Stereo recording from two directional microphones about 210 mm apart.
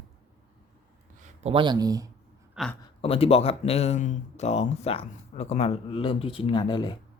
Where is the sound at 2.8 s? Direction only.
25° left (ahead or behind).